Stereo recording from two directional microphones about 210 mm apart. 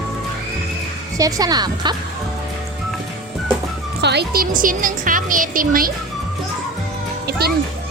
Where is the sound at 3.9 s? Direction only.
50° right (ahead or behind).